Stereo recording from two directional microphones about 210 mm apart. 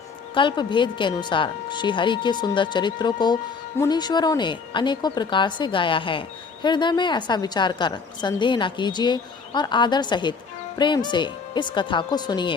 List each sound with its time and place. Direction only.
0.3 s speech: 25° left (ahead or behind)